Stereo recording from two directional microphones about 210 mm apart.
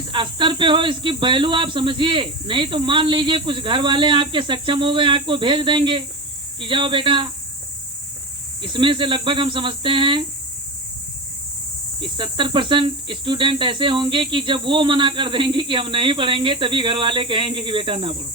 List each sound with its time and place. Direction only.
0.1 s cricket: 25° right (ahead or behind)
8.6 s cricket: 25° right (ahead or behind)
11.9 s cricket: 25° right (ahead or behind)